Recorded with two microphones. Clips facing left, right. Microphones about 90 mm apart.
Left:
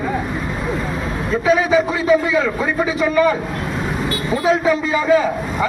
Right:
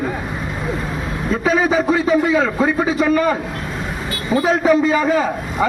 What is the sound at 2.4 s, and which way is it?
Speech, 45° right (ahead or behind).